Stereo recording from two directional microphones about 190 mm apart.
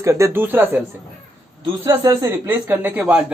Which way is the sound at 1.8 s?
20° right (ahead or behind).